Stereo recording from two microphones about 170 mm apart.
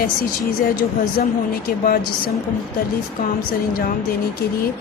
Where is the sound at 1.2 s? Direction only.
60° left (ahead or behind).